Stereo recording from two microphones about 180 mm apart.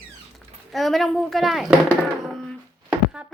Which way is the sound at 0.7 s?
Centre (ahead or behind).